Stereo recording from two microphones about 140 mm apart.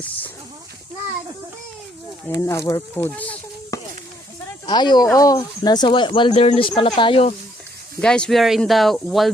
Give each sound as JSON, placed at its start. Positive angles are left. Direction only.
{"t": 2.4, "sound": "speech", "side_deg": 25}
{"t": 3.7, "sound": "a sound", "side_deg": 25}
{"t": 4.6, "sound": "speech", "side_deg": 30}
{"t": 8.0, "sound": "speech", "side_deg": 5}